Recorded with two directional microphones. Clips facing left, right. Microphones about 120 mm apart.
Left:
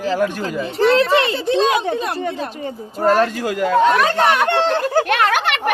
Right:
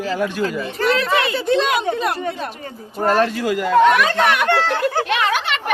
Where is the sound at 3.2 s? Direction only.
50° left (ahead or behind).